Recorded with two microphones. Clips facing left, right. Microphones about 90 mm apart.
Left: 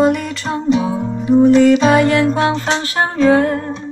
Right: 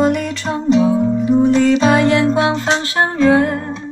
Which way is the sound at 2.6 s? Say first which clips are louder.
Right 1 dB; 25° right (ahead or behind).